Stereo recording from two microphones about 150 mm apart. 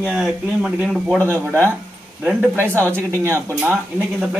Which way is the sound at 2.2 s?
15° right (ahead or behind).